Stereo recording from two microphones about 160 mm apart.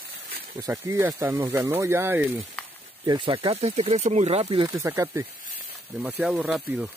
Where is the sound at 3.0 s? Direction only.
30° right (ahead or behind).